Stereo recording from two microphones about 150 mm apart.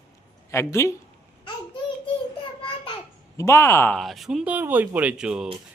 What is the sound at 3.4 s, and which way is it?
Speech, 20° left (ahead or behind).